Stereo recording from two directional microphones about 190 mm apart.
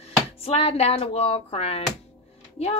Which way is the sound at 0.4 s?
30° left (ahead or behind).